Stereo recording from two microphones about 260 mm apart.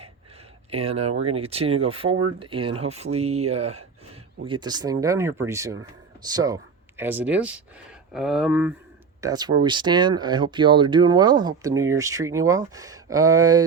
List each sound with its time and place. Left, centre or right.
0.7 s speech: right; by 8.7 s centre
9.2 s speech: centre